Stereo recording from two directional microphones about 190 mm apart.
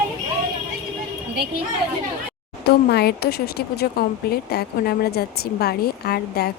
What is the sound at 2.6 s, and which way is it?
Speech, 55° left (ahead or behind).